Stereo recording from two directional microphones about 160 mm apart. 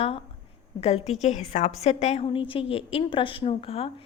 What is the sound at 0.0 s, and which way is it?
A woman's voice, 35° left (ahead or behind).